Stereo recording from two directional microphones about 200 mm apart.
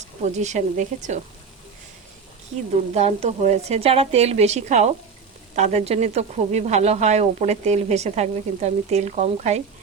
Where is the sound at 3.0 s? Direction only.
35° right (ahead or behind).